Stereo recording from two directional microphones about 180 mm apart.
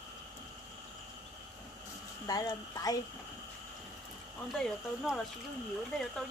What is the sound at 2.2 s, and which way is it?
Speech, 20° left (ahead or behind).